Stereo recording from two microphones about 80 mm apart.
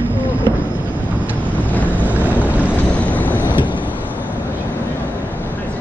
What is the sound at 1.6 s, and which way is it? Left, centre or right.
Vehicle, left.